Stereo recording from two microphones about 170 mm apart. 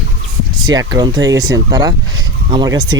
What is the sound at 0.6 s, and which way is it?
A man's voice, 25° right (ahead or behind).